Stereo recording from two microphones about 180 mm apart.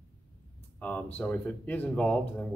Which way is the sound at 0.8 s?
10° left (ahead or behind).